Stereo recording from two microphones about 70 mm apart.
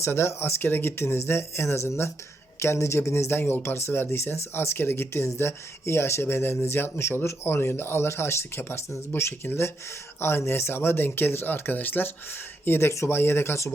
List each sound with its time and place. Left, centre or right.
0.0 s speech: left